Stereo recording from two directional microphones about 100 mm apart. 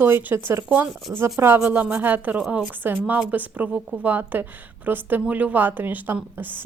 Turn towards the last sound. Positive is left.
turn(degrees=-20)  # may be behind; listen again after turning